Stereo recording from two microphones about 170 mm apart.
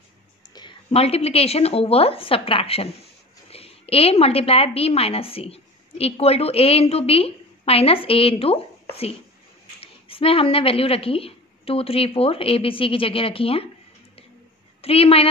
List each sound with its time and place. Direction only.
0.6 s a woman's voice: 30° left (ahead or behind)
14.8 s a woman's voice: 35° left (ahead or behind)